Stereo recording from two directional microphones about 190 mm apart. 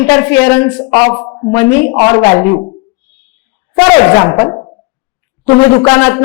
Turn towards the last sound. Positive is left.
turn(degrees=10)  # may be behind; listen again after turning